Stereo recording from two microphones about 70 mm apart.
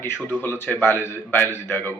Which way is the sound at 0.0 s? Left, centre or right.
Left.